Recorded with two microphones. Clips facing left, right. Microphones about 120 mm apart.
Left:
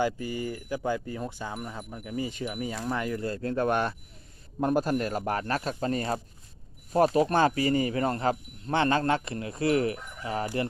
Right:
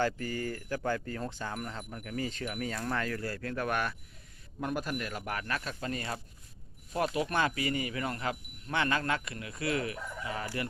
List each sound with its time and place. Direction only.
0.0 s speech: 15° left (ahead or behind); by 10.4 s 30° left (ahead or behind)
10.4 s speech: 20° left (ahead or behind)